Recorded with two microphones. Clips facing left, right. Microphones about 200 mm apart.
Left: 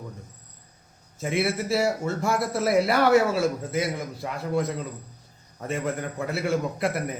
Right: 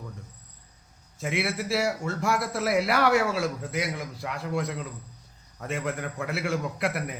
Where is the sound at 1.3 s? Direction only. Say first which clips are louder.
Left 3 dB; centre (ahead or behind).